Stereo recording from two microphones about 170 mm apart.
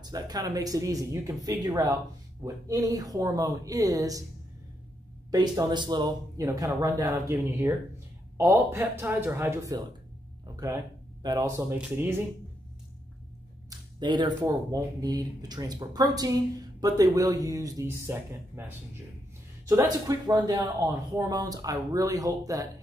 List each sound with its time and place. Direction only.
0.0 s speech: 25° right (ahead or behind)
5.3 s speech: 20° right (ahead or behind)
13.7 s a sound: 25° right (ahead or behind)
14.4 s speech: 15° right (ahead or behind)
19.7 s speech: 20° right (ahead or behind)